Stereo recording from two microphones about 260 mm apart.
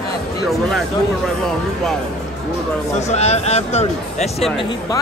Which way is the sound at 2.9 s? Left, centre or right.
Left.